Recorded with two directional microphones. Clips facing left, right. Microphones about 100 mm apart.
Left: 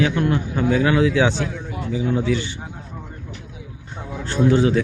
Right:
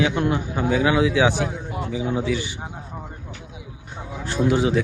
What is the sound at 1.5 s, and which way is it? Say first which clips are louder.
Speech: left 1 dB; 25° right (ahead or behind).